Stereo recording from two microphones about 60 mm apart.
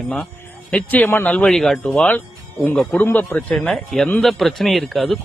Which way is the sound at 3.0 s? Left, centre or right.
Left.